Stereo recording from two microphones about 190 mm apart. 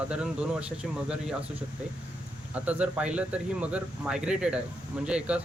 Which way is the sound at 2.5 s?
5° right (ahead or behind).